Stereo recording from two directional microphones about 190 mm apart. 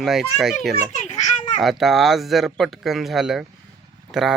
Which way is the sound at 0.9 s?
40° left (ahead or behind).